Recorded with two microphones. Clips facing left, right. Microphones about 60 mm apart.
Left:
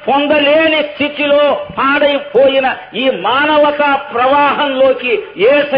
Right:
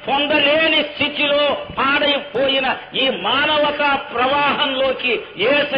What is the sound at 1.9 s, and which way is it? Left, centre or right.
A man's voice, centre.